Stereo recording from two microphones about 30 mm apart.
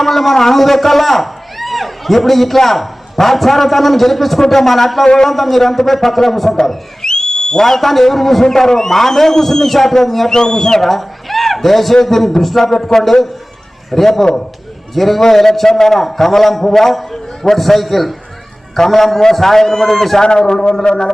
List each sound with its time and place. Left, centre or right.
0.0 s a man's voice: centre
6.6 s a man's voice: centre
10.8 s a man's voice: centre
20.9 s speech: left